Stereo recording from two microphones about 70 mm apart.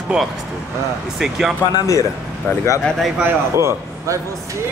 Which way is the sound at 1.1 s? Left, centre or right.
Centre.